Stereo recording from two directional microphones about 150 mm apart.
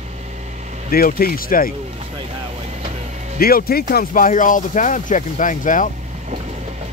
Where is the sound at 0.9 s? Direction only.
80° left.